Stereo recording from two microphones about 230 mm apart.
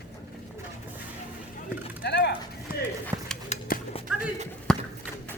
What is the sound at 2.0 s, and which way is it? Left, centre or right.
Horse, left.